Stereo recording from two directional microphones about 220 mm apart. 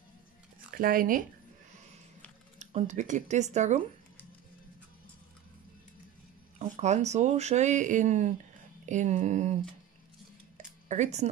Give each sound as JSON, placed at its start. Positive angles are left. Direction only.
{"t": 0.7, "sound": "speech", "side_deg": -40}
{"t": 2.6, "sound": "speech", "side_deg": -30}
{"t": 6.6, "sound": "speech", "side_deg": -30}
{"t": 10.9, "sound": "speech", "side_deg": -30}